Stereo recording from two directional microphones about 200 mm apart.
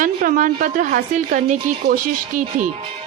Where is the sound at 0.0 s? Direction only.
40° right (ahead or behind).